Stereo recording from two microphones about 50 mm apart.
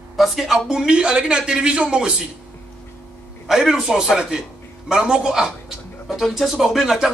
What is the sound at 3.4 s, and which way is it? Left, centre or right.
A man's voice, centre.